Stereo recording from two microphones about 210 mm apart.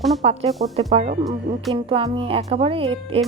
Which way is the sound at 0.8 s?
30° right (ahead or behind).